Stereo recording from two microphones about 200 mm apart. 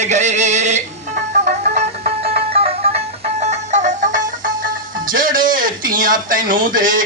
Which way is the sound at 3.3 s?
35° right (ahead or behind).